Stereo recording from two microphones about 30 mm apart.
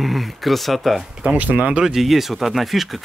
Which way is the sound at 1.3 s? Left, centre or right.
Right.